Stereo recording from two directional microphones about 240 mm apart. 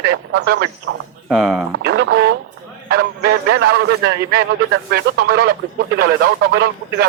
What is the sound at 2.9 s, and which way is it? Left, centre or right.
A man's voice, right.